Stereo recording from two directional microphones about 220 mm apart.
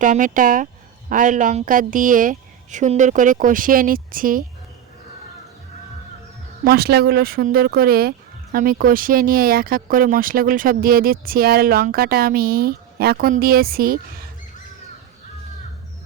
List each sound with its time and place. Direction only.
0.0 s speech: 35° right (ahead or behind)
6.7 s speech: 45° right (ahead or behind)